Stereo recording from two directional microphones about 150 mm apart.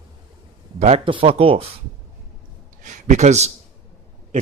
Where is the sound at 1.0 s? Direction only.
40° right (ahead or behind).